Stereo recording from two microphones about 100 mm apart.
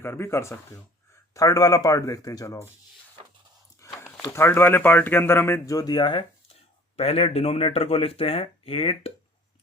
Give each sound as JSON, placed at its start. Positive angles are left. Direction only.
{"t": 0.0, "sound": "speech", "side_deg": 25}
{"t": 3.8, "sound": "a sound", "side_deg": 30}
{"t": 4.3, "sound": "speech", "side_deg": 25}
{"t": 5.7, "sound": "speech", "side_deg": 40}
{"t": 6.9, "sound": "speech", "side_deg": 85}